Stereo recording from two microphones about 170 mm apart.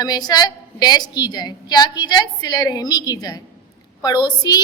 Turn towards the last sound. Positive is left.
turn(degrees=25)  # may be behind; listen again after turning